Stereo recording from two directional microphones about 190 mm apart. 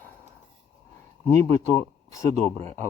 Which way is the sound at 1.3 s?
15° left (ahead or behind).